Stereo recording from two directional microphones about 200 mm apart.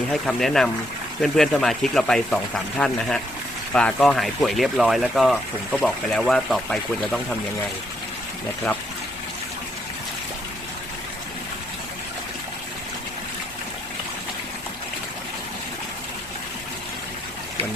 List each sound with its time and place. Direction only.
0.1 s speech: centre (ahead or behind)